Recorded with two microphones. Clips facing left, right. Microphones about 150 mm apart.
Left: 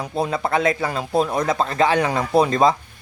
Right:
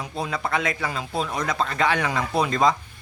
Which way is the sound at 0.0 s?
40° left (ahead or behind).